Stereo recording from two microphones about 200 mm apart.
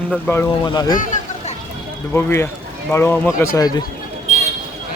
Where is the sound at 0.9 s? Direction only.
40° left (ahead or behind).